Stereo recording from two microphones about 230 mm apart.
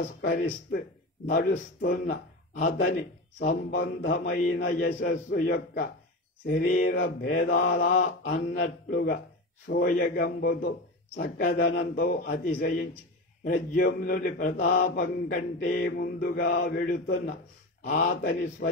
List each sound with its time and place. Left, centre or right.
0.2 s mantra: left
2.8 s a man's voice: left
3.7 s mantra: left
4.2 s mantra: left
7.6 s speech: left
7.9 s mantra: left
8.4 s mantra: left
11.1 s speech: left
11.9 s mantra: left